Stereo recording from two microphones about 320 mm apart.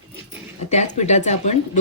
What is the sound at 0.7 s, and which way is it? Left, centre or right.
Speech, left.